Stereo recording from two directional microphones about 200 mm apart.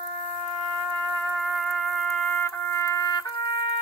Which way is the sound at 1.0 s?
5° left (ahead or behind).